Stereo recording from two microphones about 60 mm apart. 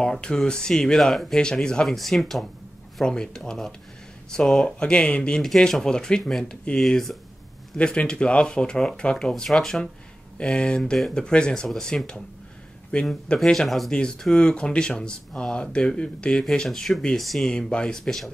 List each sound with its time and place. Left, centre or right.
0.0 s speech: centre
4.8 s speech: centre
7.7 s speech: centre
11.2 s speech: centre
13.4 s speech: centre
17.5 s speech: centre